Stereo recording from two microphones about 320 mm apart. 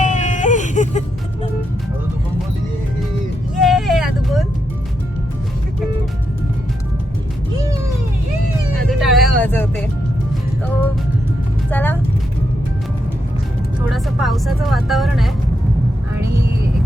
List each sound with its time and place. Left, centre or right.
0.0 s a sound: left
3.6 s vehicle: centre
8.9 s vehicle: centre
11.7 s vehicle: centre
13.9 s music: centre